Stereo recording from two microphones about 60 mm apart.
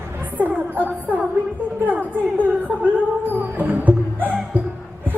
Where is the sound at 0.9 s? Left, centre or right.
Right.